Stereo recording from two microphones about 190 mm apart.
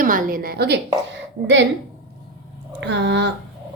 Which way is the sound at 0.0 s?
45° right (ahead or behind).